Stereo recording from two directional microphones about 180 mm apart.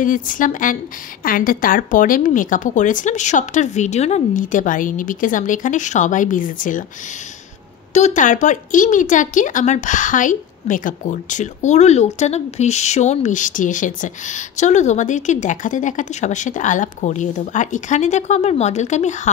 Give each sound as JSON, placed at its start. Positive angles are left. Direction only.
{"t": 0.0, "sound": "a woman's voice", "side_deg": 50}
{"t": 7.9, "sound": "a woman's voice", "side_deg": 40}